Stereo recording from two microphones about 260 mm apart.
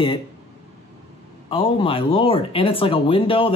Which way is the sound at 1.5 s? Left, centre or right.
Centre.